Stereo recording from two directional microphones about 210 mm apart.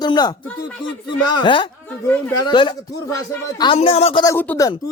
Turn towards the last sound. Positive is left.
turn(degrees=10)  # may be behind; listen again after turning